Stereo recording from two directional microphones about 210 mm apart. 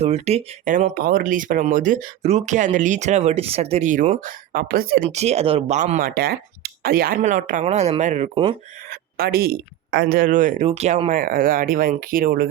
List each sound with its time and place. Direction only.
0.0 s speech: 30° right (ahead or behind)
5.0 s speech: 30° right (ahead or behind)
8.9 s speech: 45° right (ahead or behind)